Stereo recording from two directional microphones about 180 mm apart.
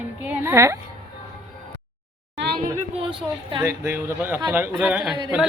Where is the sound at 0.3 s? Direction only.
15° right (ahead or behind).